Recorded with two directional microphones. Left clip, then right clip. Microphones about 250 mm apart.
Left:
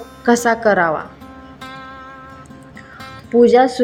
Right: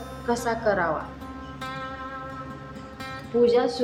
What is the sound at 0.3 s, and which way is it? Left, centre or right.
Speech, left.